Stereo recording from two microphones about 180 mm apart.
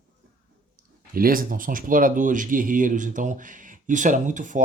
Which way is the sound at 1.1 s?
50° right (ahead or behind).